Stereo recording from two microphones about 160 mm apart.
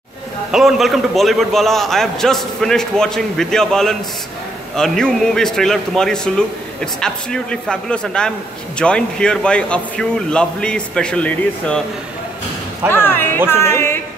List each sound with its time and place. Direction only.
0.5 s a man's voice: centre (ahead or behind)
12.9 s music: 15° left (ahead or behind)